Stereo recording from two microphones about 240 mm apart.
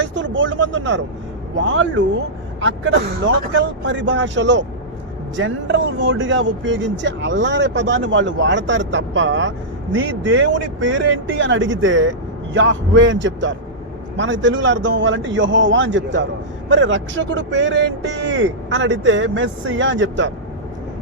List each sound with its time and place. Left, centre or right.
0.0 s speech: right